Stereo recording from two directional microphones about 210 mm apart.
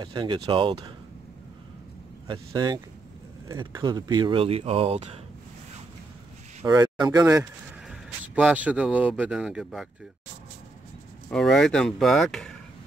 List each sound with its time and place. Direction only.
0.0 s speech: 20° right (ahead or behind)
2.2 s speech: 20° right (ahead or behind)
6.6 s speech: 15° right (ahead or behind)
7.9 s speech: 5° right (ahead or behind)
11.2 s speech: 5° left (ahead or behind)